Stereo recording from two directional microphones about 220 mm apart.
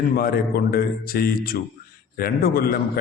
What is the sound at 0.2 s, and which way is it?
A man's voice, 40° left (ahead or behind).